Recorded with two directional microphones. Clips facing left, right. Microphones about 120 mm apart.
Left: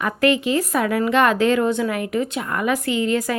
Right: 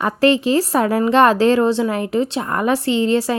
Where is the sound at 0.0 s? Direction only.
30° right (ahead or behind).